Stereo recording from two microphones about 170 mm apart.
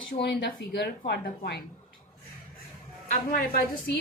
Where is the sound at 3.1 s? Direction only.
55° left (ahead or behind).